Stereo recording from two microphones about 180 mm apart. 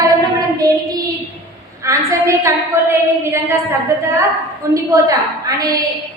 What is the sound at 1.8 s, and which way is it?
A woman's voice, 15° right (ahead or behind).